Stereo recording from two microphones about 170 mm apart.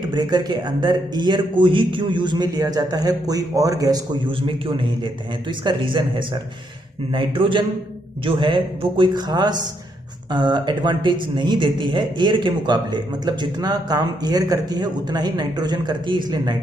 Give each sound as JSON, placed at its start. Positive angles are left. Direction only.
{"t": 0.1, "sound": "a man's voice", "side_deg": -25}